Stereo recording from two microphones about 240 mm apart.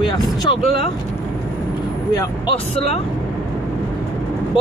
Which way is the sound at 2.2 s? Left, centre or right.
Left.